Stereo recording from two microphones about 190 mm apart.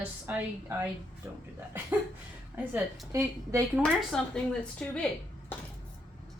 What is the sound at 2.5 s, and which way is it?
A woman's voice, 10° right (ahead or behind).